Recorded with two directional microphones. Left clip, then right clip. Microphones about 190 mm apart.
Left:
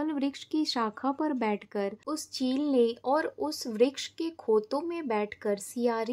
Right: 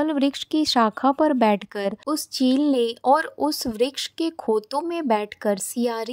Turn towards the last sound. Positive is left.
turn(degrees=-40)  # may be behind; listen again after turning